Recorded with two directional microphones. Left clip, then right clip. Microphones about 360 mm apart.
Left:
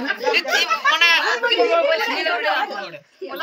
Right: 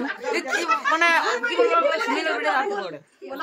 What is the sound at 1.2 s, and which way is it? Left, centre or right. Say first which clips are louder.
Chatter: left 3 dB; centre.